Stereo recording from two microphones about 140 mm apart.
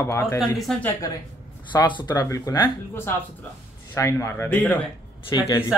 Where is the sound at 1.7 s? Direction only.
35° left (ahead or behind); by 4.7 s 10° left (ahead or behind).